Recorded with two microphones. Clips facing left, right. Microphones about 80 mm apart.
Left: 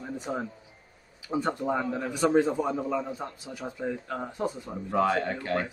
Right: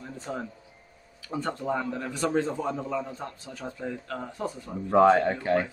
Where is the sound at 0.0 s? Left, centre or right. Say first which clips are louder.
Left 2 dB; centre.